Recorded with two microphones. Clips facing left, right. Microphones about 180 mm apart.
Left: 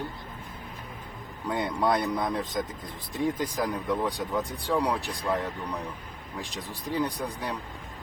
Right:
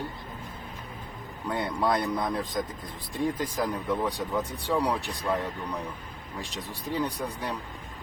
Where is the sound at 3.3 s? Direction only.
15° left (ahead or behind).